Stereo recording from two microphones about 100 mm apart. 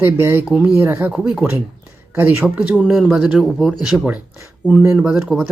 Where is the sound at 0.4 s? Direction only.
5° right (ahead or behind).